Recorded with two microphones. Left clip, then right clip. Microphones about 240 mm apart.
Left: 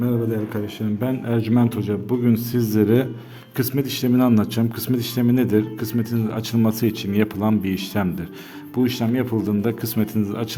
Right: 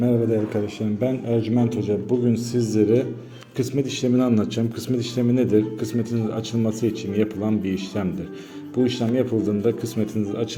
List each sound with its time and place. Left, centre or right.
0.0 s a man's voice: centre